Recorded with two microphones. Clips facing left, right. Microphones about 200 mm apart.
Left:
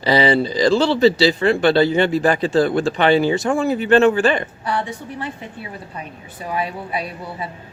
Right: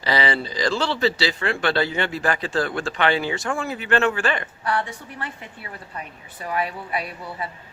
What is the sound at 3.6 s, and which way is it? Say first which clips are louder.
Speech: left 8 dB; 35° left (ahead or behind).